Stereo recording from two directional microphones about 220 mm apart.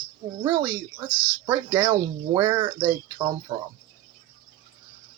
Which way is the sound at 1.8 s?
20° right (ahead or behind).